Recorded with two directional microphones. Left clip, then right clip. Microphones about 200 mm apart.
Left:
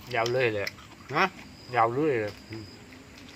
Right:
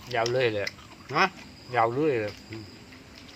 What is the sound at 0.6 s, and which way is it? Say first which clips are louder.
Speech: right 1 dB; 5° left (ahead or behind).